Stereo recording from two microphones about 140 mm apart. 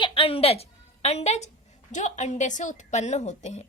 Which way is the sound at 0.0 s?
40° left (ahead or behind).